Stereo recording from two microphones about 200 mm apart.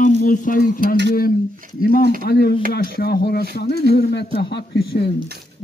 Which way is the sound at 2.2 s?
50° left (ahead or behind).